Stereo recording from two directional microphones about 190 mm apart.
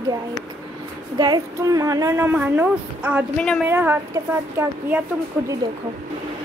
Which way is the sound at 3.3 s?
5° left (ahead or behind).